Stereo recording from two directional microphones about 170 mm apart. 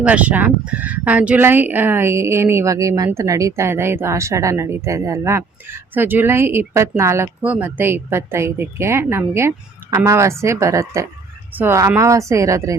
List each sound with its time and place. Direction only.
0.0 s speech: 10° right (ahead or behind)